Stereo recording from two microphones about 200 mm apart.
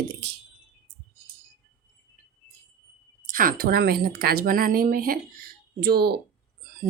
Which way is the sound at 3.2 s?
45° right (ahead or behind).